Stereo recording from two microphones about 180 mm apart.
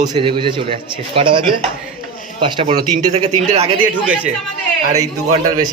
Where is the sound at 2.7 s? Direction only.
40° right (ahead or behind).